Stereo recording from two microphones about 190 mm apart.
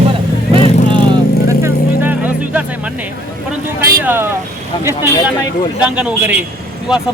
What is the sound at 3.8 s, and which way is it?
Speech, 10° right (ahead or behind).